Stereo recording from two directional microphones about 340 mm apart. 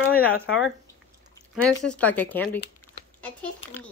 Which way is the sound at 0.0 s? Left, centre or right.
Left.